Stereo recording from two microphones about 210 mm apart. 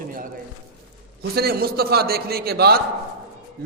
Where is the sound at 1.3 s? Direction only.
45° right (ahead or behind).